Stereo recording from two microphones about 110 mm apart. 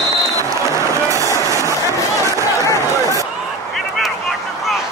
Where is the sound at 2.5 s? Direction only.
30° left (ahead or behind).